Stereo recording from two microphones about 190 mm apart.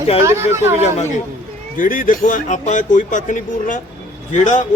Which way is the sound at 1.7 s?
45° left (ahead or behind).